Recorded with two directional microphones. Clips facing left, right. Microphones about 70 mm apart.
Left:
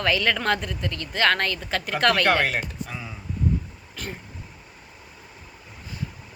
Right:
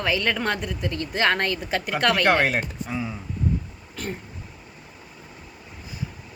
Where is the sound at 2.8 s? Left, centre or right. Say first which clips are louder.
Right 7 dB; centre.